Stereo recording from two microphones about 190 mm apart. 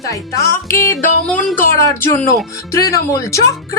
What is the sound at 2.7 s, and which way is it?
Music, 15° left (ahead or behind).